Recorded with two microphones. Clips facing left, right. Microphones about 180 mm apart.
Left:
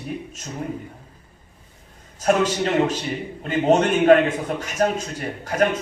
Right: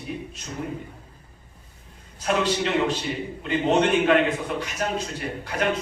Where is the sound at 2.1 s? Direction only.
45° left (ahead or behind).